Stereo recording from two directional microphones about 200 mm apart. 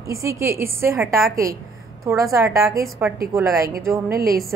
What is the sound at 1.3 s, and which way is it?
Speech, 45° right (ahead or behind).